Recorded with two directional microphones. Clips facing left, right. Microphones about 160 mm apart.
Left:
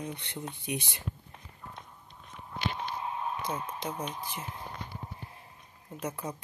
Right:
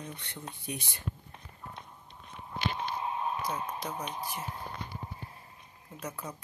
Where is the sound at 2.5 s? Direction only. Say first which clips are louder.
Right 1 dB; 15° right (ahead or behind).